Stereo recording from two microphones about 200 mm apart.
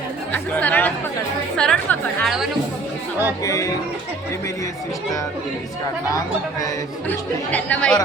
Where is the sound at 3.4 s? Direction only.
15° left (ahead or behind).